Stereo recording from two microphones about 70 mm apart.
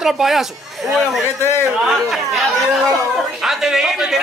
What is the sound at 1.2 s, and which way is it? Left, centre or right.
Speech, left.